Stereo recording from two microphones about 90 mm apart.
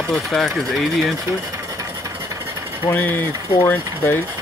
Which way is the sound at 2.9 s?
20° left (ahead or behind).